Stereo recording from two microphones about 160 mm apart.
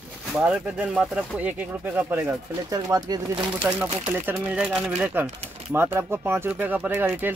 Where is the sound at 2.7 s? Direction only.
20° right (ahead or behind).